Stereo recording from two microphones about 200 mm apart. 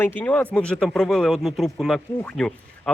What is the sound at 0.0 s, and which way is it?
Speech, 10° left (ahead or behind).